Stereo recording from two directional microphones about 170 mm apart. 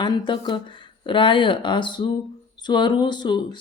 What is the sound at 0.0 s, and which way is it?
Speech, 30° left (ahead or behind).